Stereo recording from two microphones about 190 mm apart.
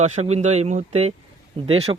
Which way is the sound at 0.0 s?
35° right (ahead or behind).